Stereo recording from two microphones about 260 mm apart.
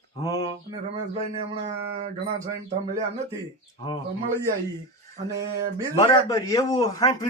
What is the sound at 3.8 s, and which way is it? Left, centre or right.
Speech, centre.